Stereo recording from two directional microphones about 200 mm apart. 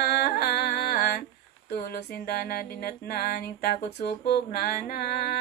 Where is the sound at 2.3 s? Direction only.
50° left (ahead or behind).